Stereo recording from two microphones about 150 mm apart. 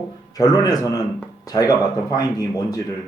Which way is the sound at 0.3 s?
25° left (ahead or behind).